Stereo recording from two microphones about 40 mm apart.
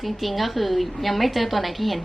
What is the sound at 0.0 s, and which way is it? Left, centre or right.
A woman's voice, centre.